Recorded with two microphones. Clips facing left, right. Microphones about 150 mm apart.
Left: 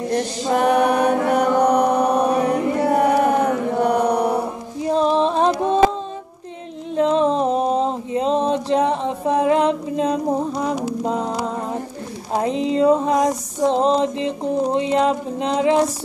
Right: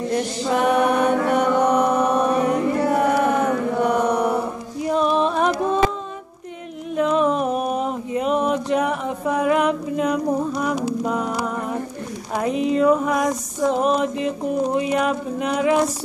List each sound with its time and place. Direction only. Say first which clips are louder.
0.5 s mantra: left 2 dB; 40° left (ahead or behind)
4.8 s music: left 2 dB; 30° left (ahead or behind)
7.0 s a sound: left 2 dB; 30° left (ahead or behind)
12.4 s female singing: left 1 dB; 25° left (ahead or behind)